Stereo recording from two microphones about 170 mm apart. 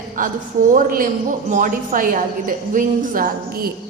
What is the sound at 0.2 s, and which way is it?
A woman's voice, 50° right (ahead or behind).